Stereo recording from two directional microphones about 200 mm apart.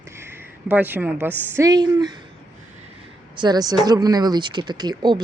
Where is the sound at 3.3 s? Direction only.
20° right (ahead or behind).